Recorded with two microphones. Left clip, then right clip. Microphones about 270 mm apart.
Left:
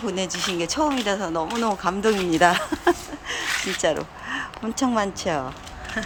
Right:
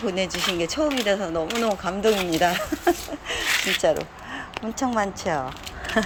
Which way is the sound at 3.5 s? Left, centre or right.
Right.